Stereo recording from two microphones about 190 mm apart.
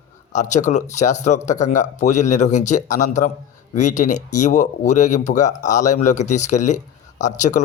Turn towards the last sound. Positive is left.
turn(degrees=40)  # may be behind; listen again after turning